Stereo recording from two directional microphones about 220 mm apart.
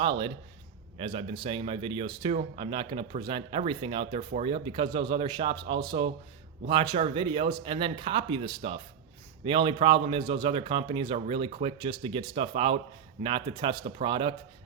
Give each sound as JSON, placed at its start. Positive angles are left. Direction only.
{"t": 0.0, "sound": "a man's voice", "side_deg": -25}